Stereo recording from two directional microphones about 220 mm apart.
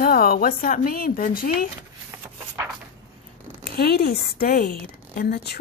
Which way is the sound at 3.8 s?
45° left (ahead or behind).